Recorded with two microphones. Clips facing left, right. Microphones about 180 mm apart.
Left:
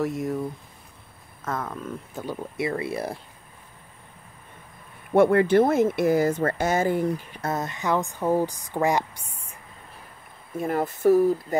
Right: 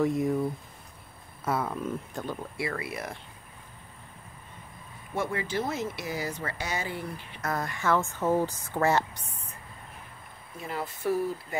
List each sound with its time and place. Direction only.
0.0 s speech: centre (ahead or behind)
2.5 s speech: 25° left (ahead or behind)
5.1 s speech: 60° left (ahead or behind); by 7.4 s 45° left (ahead or behind)
7.4 s speech: 20° left (ahead or behind)
10.6 s speech: 50° left (ahead or behind)